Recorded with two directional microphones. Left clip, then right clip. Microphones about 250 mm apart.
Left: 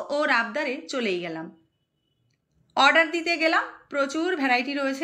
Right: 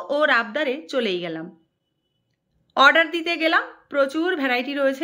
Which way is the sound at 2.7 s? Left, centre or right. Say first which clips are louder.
Right 3 dB; centre.